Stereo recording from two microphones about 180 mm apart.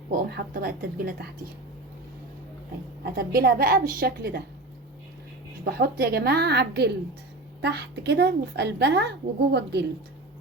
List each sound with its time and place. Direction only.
0.1 s a woman's voice: 55° right (ahead or behind)
3.0 s a woman's voice: 60° right (ahead or behind)
5.6 s a woman's voice: 60° right (ahead or behind)